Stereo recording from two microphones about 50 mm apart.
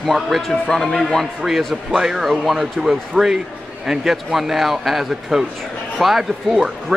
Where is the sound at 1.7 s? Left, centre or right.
Centre.